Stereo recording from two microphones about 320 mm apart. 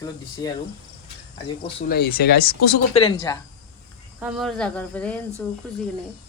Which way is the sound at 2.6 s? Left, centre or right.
Left.